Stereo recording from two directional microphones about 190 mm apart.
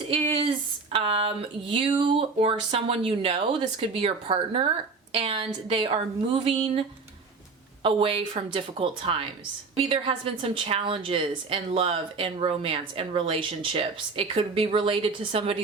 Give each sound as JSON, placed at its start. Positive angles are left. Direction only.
{"t": 0.9, "sound": "a woman's voice", "side_deg": -30}